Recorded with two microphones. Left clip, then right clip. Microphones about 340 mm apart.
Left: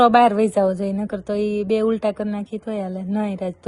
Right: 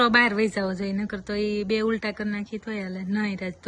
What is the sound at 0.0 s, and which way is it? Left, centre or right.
A woman's voice, centre.